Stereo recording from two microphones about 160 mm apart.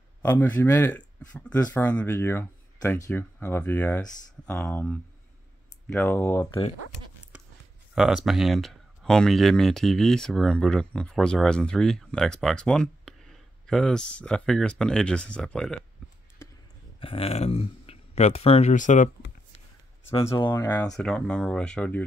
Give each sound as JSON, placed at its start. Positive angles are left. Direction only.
{"t": 0.2, "sound": "speech", "side_deg": 10}
{"t": 7.3, "sound": "a sound", "side_deg": -10}
{"t": 7.9, "sound": "speech", "side_deg": -5}
{"t": 17.0, "sound": "speech", "side_deg": 35}
{"t": 20.2, "sound": "speech", "side_deg": 25}
{"t": 20.9, "sound": "speech", "side_deg": 5}